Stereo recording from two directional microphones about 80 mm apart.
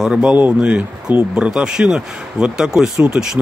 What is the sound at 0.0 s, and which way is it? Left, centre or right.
Speech, centre.